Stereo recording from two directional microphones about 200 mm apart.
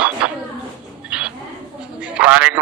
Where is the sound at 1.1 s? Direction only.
5° right (ahead or behind).